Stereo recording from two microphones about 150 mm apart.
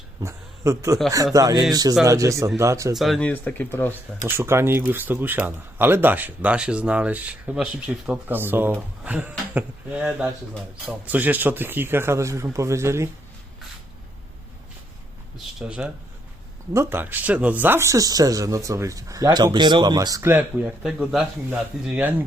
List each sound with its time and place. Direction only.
0.2 s a man's voice: 20° right (ahead or behind)
2.9 s speech: centre (ahead or behind)
4.3 s speech: 15° right (ahead or behind)
15.5 s speech: 5° right (ahead or behind)
21.0 s speech: centre (ahead or behind)